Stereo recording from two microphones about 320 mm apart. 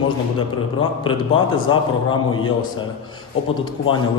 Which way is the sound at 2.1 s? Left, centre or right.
Centre.